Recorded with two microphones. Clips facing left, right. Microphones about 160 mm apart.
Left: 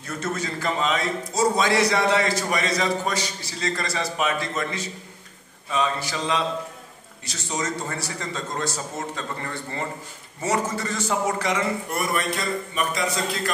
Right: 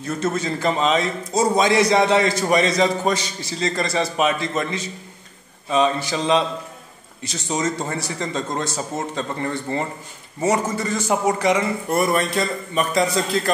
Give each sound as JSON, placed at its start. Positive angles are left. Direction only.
{"t": 0.0, "sound": "a man's voice", "side_deg": -25}
{"t": 11.9, "sound": "speech", "side_deg": -30}